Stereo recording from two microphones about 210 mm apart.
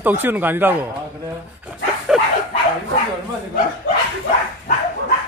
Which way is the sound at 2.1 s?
5° right (ahead or behind).